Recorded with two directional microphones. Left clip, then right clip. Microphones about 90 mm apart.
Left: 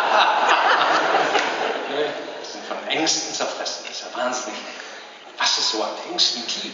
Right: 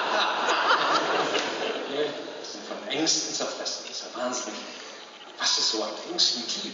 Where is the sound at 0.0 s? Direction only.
30° left (ahead or behind).